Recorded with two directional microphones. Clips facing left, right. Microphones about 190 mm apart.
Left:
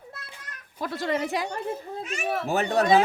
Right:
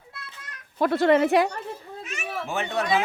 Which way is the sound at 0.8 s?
60° right (ahead or behind).